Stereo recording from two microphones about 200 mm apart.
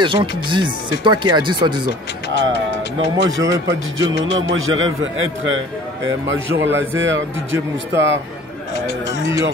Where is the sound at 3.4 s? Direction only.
15° right (ahead or behind).